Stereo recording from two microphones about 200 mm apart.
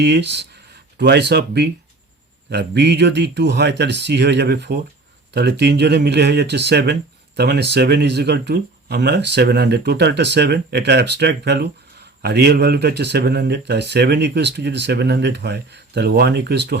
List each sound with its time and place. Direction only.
0.0 s speech: 55° right (ahead or behind)